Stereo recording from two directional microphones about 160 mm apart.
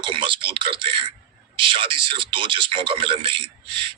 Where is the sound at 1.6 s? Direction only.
30° right (ahead or behind).